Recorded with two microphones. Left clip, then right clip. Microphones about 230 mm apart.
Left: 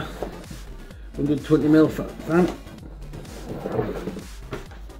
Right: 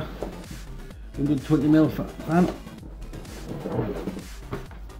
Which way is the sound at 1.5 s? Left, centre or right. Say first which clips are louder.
Left 3 dB; right.